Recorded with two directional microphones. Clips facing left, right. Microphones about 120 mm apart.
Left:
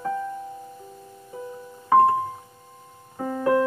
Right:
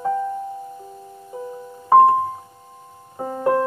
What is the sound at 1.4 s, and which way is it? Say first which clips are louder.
Music: right 4 dB; 30° right (ahead or behind).